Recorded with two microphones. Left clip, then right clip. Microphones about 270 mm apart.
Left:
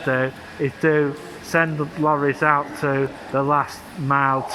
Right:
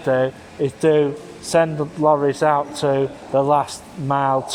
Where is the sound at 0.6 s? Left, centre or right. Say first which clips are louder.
Right 3 dB; right.